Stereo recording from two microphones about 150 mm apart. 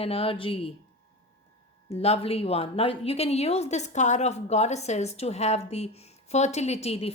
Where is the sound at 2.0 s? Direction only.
40° left (ahead or behind).